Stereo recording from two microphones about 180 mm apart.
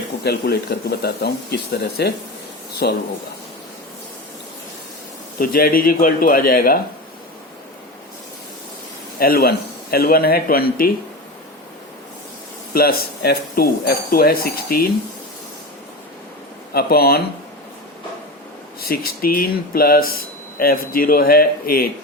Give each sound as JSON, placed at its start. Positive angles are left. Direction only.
{"t": 0.3, "sound": "speech", "side_deg": 60}
{"t": 5.4, "sound": "speech", "side_deg": 55}
{"t": 9.1, "sound": "speech", "side_deg": 55}
{"t": 12.7, "sound": "speech", "side_deg": 55}
{"t": 16.7, "sound": "speech", "side_deg": 60}
{"t": 18.8, "sound": "speech", "side_deg": 55}